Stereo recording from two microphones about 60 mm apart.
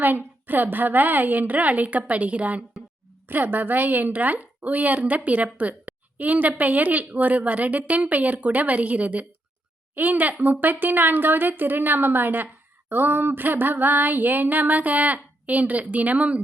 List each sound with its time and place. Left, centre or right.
0.0 s a woman's voice: right
3.2 s a woman's voice: right
9.9 s a sound: right